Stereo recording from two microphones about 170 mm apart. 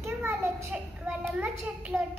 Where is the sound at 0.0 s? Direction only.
15° right (ahead or behind).